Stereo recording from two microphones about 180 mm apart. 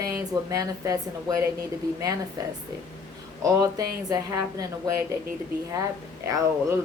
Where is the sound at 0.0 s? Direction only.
20° right (ahead or behind).